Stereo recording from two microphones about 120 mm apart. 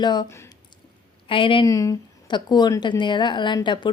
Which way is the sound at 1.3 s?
45° left (ahead or behind).